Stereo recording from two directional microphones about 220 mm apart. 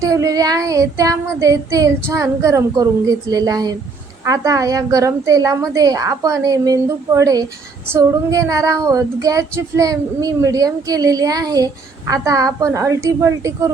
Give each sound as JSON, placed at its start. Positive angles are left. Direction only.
{"t": 0.0, "sound": "speech", "side_deg": -15}